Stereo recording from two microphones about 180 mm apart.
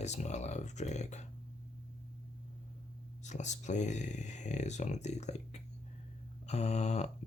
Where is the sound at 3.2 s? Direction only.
40° left (ahead or behind).